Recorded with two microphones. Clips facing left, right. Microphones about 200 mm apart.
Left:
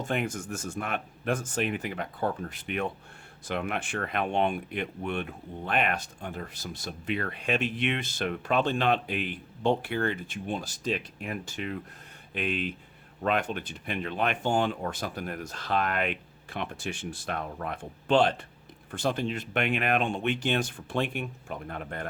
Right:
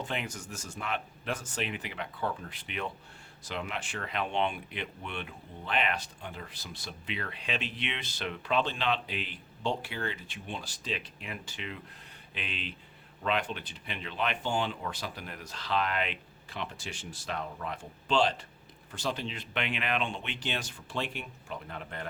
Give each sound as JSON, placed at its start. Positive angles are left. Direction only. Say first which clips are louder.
{"t": 0.0, "sound": "speech", "louder": "left 6 dB", "side_deg": 50}